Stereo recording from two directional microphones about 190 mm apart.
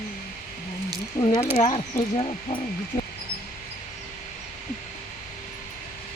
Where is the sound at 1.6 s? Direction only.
30° left (ahead or behind).